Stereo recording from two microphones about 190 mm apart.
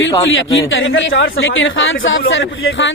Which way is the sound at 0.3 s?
80° left.